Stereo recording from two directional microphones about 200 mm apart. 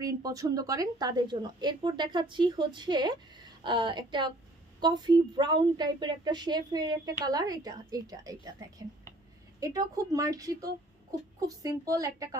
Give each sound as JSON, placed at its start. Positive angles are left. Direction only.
{"t": 0.0, "sound": "a woman's voice", "side_deg": -20}